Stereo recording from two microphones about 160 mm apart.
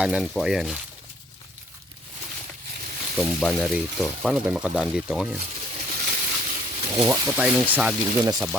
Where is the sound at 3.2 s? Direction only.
Centre (ahead or behind).